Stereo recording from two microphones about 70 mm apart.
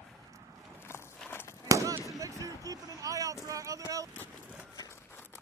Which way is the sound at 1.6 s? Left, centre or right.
Right.